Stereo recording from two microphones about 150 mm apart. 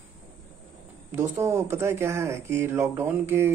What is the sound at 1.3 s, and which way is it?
Speech, 20° right (ahead or behind).